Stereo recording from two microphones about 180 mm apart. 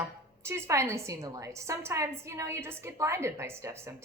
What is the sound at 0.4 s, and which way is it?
A woman's voice, 15° right (ahead or behind).